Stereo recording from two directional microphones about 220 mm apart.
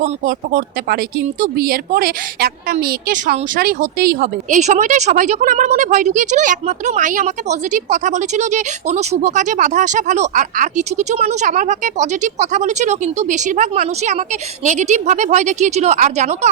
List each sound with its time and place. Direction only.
0.0 s a woman's voice: 40° right (ahead or behind)